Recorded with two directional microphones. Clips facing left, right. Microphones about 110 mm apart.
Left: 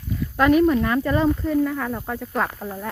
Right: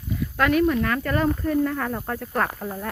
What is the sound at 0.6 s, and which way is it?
Speech, 10° left (ahead or behind).